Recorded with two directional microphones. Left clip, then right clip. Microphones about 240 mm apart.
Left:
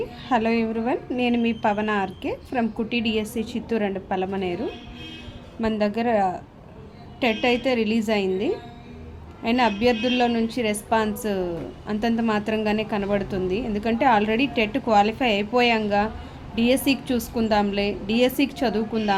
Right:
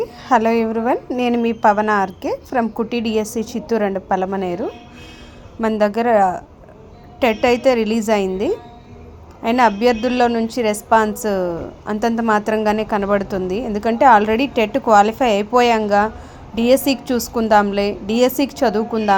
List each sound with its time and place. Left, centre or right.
0.0 s a woman's voice: right
5.5 s a woman's voice: right